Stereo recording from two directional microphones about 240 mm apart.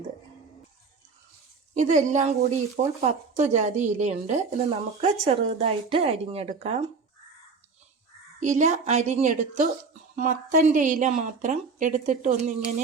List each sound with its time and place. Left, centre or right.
1.7 s a woman's voice: right
8.4 s a woman's voice: right